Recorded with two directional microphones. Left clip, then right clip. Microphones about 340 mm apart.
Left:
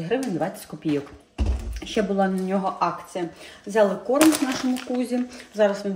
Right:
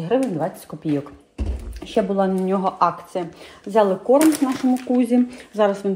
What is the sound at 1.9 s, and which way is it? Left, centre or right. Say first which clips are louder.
Speech: right 3 dB; centre.